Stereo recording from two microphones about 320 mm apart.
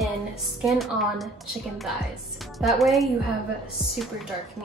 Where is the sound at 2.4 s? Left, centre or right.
Centre.